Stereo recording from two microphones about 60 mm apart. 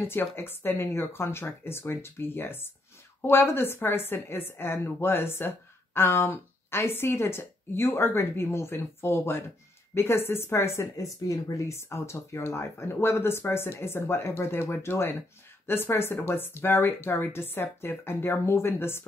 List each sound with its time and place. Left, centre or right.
0.0 s a woman's voice: left